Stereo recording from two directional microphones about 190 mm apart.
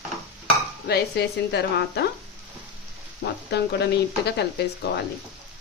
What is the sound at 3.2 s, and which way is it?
Speech, 60° left (ahead or behind).